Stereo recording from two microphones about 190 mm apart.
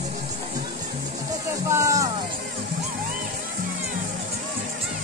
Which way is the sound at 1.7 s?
15° right (ahead or behind).